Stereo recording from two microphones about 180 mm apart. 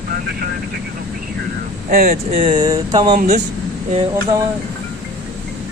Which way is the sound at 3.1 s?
45° right (ahead or behind).